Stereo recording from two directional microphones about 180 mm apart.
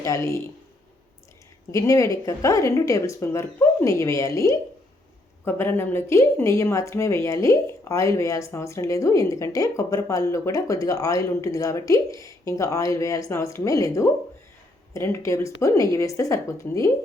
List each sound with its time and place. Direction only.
0.0 s a woman's voice: 15° left (ahead or behind)
1.7 s a woman's voice: 15° left (ahead or behind)